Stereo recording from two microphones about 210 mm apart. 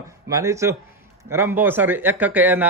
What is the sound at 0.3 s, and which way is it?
A man's voice, 15° right (ahead or behind).